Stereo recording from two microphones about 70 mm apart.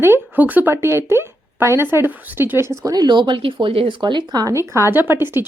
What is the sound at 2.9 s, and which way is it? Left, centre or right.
Speech, right.